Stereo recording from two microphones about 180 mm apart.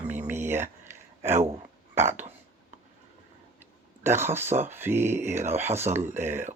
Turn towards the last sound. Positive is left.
turn(degrees=-10)  # may be behind; listen again after turning